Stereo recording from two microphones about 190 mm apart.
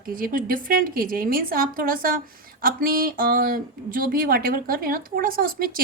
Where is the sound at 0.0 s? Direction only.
50° right (ahead or behind).